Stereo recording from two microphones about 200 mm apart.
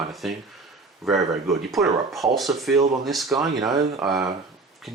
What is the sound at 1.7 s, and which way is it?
Speech, centre (ahead or behind).